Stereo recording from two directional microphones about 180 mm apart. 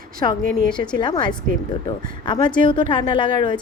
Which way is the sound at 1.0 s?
25° left (ahead or behind).